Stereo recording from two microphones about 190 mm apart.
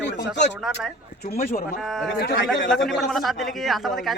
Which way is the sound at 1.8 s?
Centre (ahead or behind).